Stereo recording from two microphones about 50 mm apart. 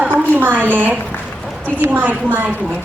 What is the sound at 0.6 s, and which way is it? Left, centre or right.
A woman's voice, right.